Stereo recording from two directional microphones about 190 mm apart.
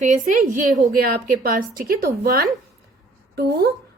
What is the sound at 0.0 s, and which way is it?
Speech, 40° right (ahead or behind).